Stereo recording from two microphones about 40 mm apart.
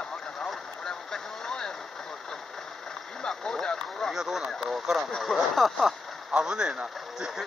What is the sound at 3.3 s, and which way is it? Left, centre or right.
Speech, centre.